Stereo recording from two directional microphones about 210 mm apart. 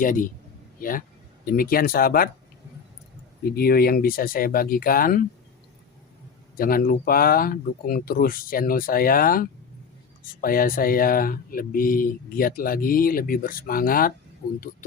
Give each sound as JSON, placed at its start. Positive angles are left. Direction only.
{"t": 0.0, "sound": "a man's voice", "side_deg": 40}
{"t": 3.5, "sound": "speech", "side_deg": 45}
{"t": 6.6, "sound": "speech", "side_deg": 45}